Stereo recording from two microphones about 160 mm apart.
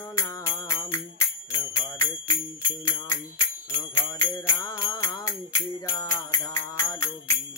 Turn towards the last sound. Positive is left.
turn(degrees=15)  # may be behind; listen again after turning